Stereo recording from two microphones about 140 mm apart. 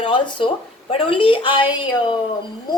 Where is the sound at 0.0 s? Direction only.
35° left (ahead or behind).